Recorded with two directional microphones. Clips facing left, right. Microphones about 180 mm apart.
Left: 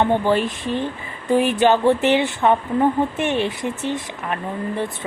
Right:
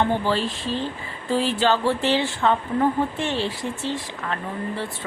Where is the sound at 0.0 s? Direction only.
20° left (ahead or behind).